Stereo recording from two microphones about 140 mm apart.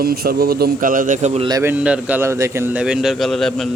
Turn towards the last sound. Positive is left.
turn(degrees=0)  # may be behind; listen again after turning